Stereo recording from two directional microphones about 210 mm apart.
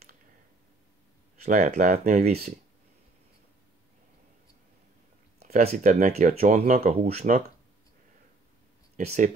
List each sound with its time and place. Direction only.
1.4 s speech: 30° right (ahead or behind)
5.4 s speech: 30° right (ahead or behind)
8.9 s speech: 35° right (ahead or behind)